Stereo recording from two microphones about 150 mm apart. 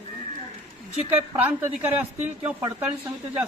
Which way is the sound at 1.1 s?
10° right (ahead or behind).